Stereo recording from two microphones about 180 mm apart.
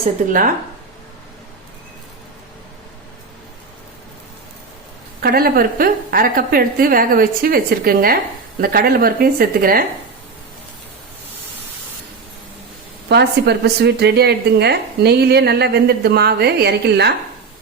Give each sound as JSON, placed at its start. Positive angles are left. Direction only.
{"t": 0.3, "sound": "speech", "side_deg": -50}
{"t": 5.2, "sound": "a woman's voice", "side_deg": -55}
{"t": 13.1, "sound": "a woman's voice", "side_deg": -65}